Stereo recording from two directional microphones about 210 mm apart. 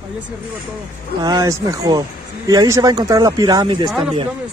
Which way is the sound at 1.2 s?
20° right (ahead or behind).